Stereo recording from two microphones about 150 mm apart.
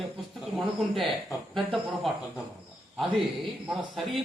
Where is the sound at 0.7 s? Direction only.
Centre (ahead or behind).